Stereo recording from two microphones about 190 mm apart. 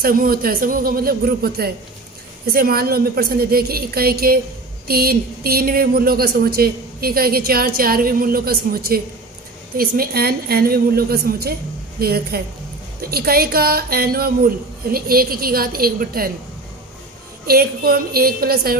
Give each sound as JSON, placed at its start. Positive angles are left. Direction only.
{"t": 0.0, "sound": "a woman's voice", "side_deg": -50}
{"t": 17.5, "sound": "a woman's voice", "side_deg": -50}